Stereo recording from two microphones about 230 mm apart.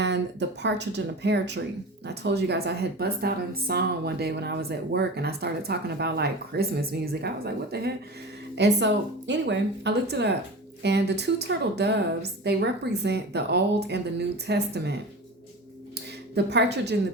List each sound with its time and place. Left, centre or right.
0.0 s a woman's voice: right
16.3 s a woman's voice: right